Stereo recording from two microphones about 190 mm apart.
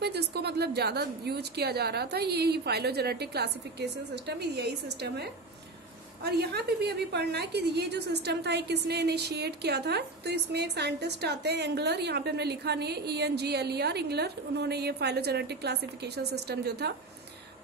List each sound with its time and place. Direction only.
0.0 s a woman's voice: 60° right (ahead or behind)